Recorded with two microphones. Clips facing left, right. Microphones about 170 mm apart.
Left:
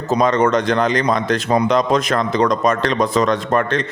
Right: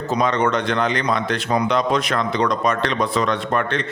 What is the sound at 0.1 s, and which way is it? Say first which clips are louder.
A man's voice: left 4 dB; 45° left (ahead or behind).